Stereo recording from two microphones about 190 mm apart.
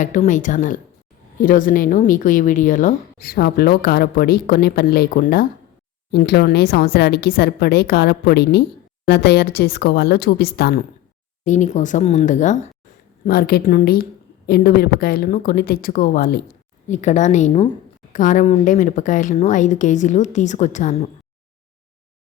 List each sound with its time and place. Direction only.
0.0 s speech: 40° left (ahead or behind)
6.1 s a woman's voice: 60° left (ahead or behind)
11.4 s speech: 40° left (ahead or behind)
13.2 s speech: 55° left (ahead or behind)
16.9 s speech: 40° left (ahead or behind)